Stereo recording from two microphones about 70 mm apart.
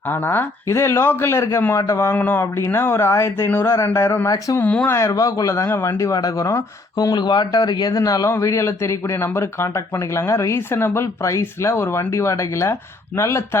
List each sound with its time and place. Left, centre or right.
0.1 s speech: left
0.7 s a man's voice: left
4.5 s speech: left
4.9 s a man's voice: left
6.0 s a man's voice: left
6.9 s a man's voice: left